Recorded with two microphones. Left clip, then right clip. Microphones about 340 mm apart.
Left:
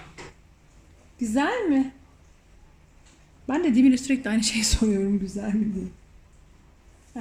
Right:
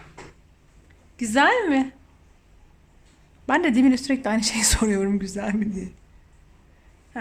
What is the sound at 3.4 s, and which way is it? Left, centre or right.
A woman's voice, right.